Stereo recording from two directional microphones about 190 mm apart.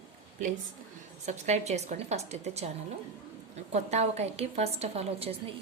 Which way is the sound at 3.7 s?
35° right (ahead or behind).